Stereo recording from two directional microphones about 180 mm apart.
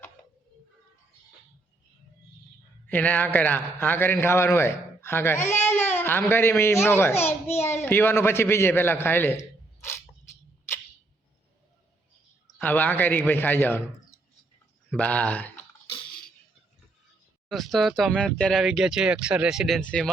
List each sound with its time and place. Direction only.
2.8 s a man's voice: 10° left (ahead or behind)
5.4 s speech: 40° left (ahead or behind)
5.6 s baby cry: 10° left (ahead or behind)
6.0 s a man's voice: 10° left (ahead or behind)
12.5 s a man's voice: 10° left (ahead or behind)
14.9 s a man's voice: 5° left (ahead or behind)
17.5 s speech: centre (ahead or behind)